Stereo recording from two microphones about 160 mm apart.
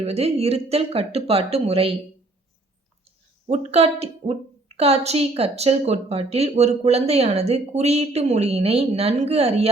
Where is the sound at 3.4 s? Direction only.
45° right (ahead or behind).